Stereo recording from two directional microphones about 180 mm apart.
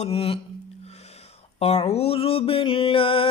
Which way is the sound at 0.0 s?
30° left (ahead or behind).